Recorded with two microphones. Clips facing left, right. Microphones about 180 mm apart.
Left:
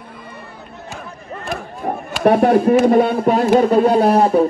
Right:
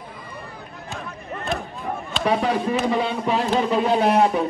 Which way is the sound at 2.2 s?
55° left (ahead or behind).